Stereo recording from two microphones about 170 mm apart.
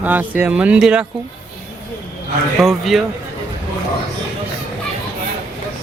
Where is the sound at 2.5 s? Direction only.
Centre (ahead or behind).